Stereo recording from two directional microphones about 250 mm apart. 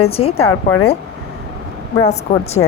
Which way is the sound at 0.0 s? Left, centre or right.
Left.